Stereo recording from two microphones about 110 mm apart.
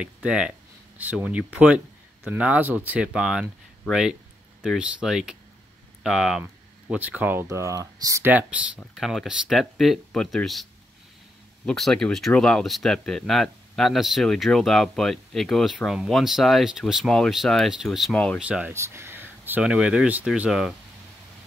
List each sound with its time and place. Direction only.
0.0 s speech: 5° right (ahead or behind)
7.4 s speech: 30° right (ahead or behind)
8.3 s speech: 15° right (ahead or behind)
8.7 s speech: centre (ahead or behind)
18.7 s a sound: 25° right (ahead or behind)
19.6 s speech: 5° right (ahead or behind)